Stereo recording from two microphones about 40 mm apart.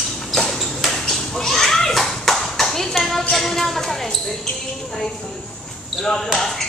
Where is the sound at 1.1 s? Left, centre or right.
Centre.